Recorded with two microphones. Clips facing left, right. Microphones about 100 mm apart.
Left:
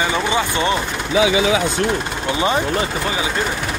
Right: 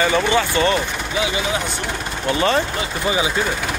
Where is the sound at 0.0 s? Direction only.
15° left (ahead or behind).